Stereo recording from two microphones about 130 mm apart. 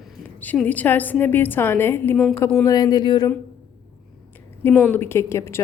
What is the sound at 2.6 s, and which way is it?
Speech, 30° left (ahead or behind).